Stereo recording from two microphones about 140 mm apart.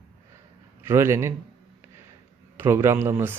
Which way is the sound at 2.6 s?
20° right (ahead or behind).